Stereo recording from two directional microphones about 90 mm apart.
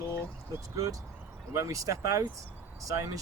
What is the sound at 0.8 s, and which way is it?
Speech, 40° right (ahead or behind).